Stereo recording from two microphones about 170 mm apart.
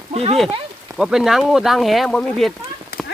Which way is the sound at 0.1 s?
35° right (ahead or behind).